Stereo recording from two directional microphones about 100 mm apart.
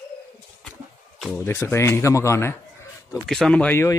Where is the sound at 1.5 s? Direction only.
25° left (ahead or behind).